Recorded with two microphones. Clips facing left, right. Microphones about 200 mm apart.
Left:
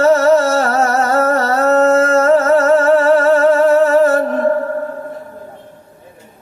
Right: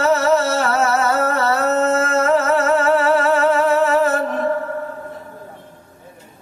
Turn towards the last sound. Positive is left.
turn(degrees=40)  # may be behind; listen again after turning